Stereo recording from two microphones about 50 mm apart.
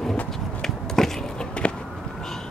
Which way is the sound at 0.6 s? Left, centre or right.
Centre.